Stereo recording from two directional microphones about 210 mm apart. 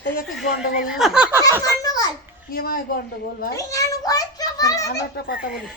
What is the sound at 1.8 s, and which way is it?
Speech, 15° left (ahead or behind).